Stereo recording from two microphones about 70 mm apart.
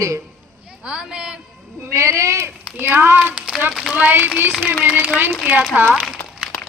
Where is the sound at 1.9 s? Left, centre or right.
Right.